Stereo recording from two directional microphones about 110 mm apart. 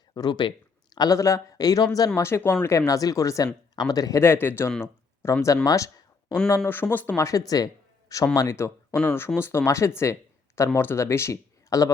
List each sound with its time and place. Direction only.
0.1 s a man's voice: 40° left (ahead or behind)
5.6 s a sound: 30° left (ahead or behind)
6.7 s speech: 20° left (ahead or behind)
7.2 s a man's voice: 30° left (ahead or behind)